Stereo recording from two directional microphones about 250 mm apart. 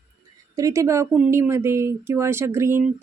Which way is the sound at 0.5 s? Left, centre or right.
Centre.